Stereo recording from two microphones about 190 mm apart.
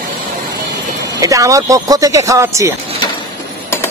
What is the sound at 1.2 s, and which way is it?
Speech, 15° right (ahead or behind).